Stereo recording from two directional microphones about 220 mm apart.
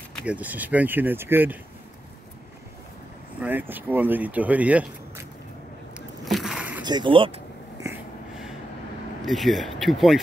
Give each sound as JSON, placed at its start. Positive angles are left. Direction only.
{"t": 0.2, "sound": "speech", "side_deg": -5}
{"t": 3.3, "sound": "speech", "side_deg": -10}
{"t": 5.9, "sound": "a sound", "side_deg": 0}
{"t": 6.8, "sound": "speech", "side_deg": -20}
{"t": 7.8, "sound": "wheeze", "side_deg": -10}
{"t": 9.2, "sound": "speech", "side_deg": 0}